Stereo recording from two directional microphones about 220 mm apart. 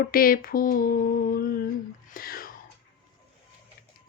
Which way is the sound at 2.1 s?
40° left (ahead or behind).